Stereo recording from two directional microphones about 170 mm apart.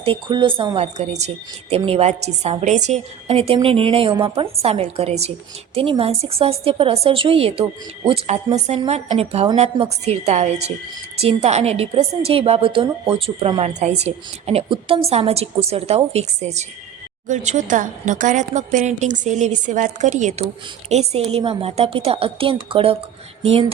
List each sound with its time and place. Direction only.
0.0 s speech: 30° right (ahead or behind)
0.9 s a woman's voice: 40° right (ahead or behind)